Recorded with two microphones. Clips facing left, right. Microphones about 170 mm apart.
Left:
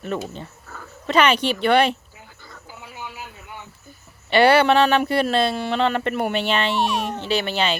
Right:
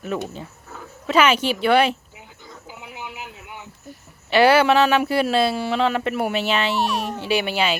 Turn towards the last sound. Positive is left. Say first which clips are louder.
# right 1 dB
turn(degrees=-10)  # may be behind; listen again after turning